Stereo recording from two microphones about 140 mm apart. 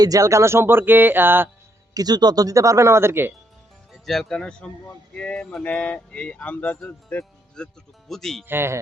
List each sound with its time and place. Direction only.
0.0 s speech: 25° right (ahead or behind)
1.9 s speech: 25° right (ahead or behind)
4.0 s speech: centre (ahead or behind)
8.4 s speech: 15° right (ahead or behind)